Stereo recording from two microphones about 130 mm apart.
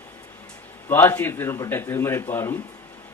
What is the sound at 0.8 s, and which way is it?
A man's voice, 20° left (ahead or behind).